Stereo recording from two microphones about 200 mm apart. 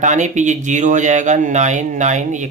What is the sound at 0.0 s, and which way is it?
Speech, 35° right (ahead or behind).